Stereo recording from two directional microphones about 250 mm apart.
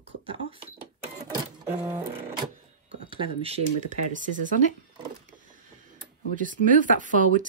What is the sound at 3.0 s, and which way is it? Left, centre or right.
Speech, right.